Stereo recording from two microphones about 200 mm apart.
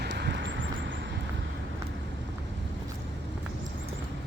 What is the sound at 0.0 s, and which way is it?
Vehicle, 60° right (ahead or behind).